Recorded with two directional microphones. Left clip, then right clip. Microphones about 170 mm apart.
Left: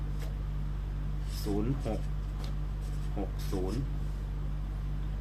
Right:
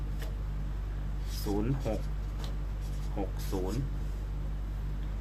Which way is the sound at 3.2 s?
10° right (ahead or behind).